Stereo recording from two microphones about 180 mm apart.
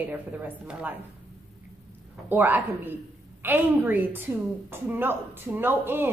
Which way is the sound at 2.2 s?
10° right (ahead or behind).